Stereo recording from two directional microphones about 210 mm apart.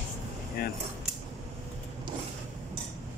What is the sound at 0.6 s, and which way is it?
Speech, 45° left (ahead or behind).